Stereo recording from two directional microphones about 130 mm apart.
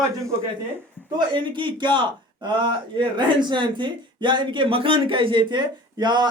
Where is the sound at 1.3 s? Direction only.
40° right (ahead or behind).